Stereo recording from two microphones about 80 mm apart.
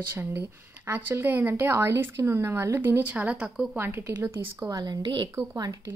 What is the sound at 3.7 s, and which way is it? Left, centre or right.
Speech, right.